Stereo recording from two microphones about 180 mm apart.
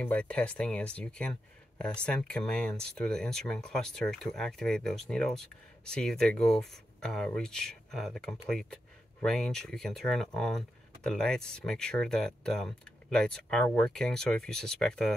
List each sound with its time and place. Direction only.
0.0 s speech: 5° left (ahead or behind)